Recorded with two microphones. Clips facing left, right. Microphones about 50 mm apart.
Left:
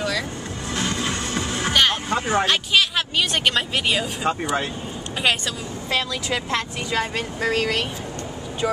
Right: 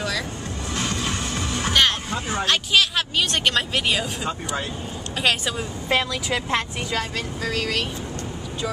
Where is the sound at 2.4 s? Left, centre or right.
Centre.